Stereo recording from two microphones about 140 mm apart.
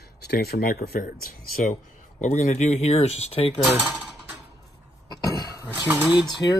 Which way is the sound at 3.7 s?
10° right (ahead or behind).